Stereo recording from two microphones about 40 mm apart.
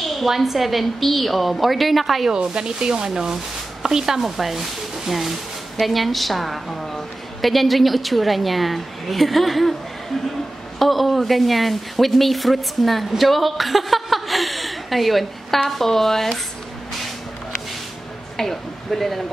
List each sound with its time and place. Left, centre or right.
0.3 s a woman's voice: centre
2.3 s a woman's voice: centre
10.8 s a woman's voice: centre
18.4 s speech: centre